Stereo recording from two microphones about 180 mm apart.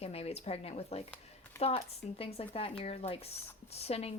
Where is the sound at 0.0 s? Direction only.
35° left (ahead or behind).